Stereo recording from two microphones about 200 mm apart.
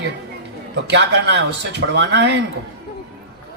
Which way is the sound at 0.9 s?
60° right (ahead or behind).